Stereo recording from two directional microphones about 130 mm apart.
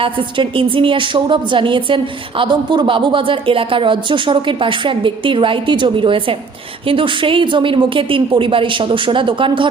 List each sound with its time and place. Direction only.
0.0 s a woman's voice: 40° right (ahead or behind)